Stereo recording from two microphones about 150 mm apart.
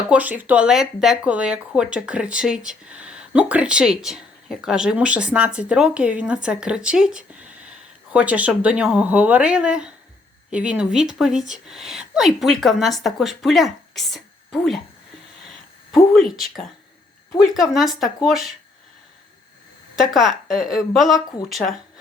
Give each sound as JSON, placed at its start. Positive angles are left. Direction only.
{"t": 0.1, "sound": "a woman's voice", "side_deg": -10}
{"t": 15.9, "sound": "a woman's voice", "side_deg": 0}
{"t": 20.0, "sound": "a woman's voice", "side_deg": 0}